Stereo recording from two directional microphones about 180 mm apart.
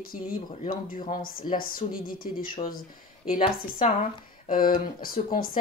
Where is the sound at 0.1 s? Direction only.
50° left (ahead or behind).